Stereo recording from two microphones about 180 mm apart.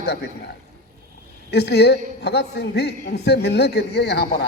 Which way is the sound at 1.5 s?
65° left (ahead or behind).